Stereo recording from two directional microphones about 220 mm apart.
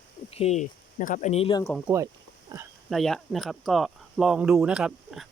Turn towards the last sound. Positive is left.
turn(degrees=0)  # may be behind; listen again after turning